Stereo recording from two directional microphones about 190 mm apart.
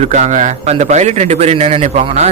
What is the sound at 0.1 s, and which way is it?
Speech, 40° right (ahead or behind).